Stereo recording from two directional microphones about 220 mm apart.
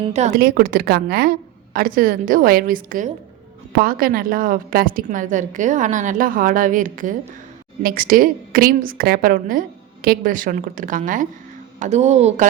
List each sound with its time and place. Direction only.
0.0 s a woman's voice: 30° right (ahead or behind)
0.3 s a woman's voice: 45° right (ahead or behind)